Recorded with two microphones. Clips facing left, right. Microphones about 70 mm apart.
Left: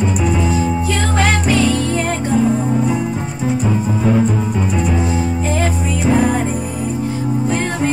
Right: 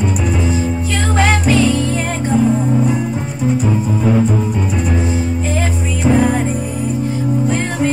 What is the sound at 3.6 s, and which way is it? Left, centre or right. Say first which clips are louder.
Music: right 1 dB; centre.